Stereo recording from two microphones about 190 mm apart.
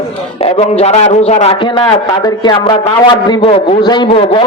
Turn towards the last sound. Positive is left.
turn(degrees=25)  # may be behind; listen again after turning